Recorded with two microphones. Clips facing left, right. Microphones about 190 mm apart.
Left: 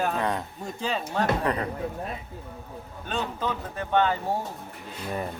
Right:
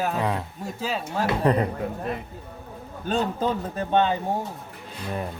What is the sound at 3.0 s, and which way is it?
A man's voice, 35° right (ahead or behind).